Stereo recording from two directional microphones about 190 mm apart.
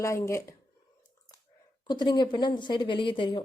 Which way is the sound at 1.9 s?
25° left (ahead or behind).